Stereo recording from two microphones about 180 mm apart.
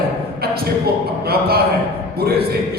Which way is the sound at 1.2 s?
60° right (ahead or behind).